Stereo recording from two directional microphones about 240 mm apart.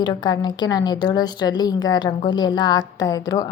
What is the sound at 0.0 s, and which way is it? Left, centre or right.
A woman's voice, centre.